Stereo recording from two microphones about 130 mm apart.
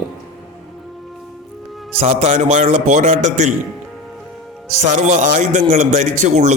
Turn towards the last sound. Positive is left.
turn(degrees=-65)  # may be behind; listen again after turning